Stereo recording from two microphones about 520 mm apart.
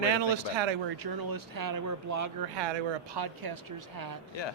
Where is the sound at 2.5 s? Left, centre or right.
Right.